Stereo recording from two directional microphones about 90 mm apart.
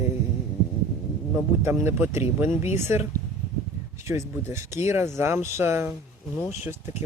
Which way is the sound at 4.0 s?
30° right (ahead or behind).